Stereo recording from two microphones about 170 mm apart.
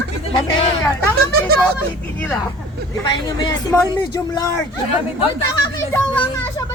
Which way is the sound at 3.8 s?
15° left (ahead or behind).